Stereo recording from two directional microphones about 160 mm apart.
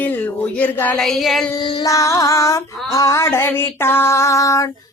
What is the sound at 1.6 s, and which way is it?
Female singing, 30° left (ahead or behind).